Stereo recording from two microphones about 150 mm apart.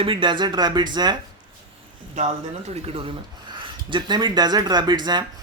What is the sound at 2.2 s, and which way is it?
Speech, 50° right (ahead or behind).